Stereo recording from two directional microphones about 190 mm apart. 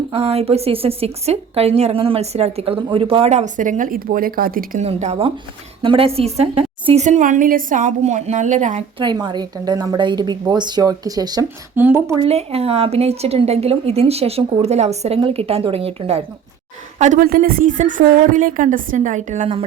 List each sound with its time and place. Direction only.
0.1 s a woman's voice: 30° right (ahead or behind); by 4.9 s 50° right (ahead or behind)
4.9 s a woman's voice: 35° right (ahead or behind)
9.0 s speech: 25° right (ahead or behind)
12.2 s a woman's voice: 30° right (ahead or behind)
17.0 s a woman's voice: 40° right (ahead or behind)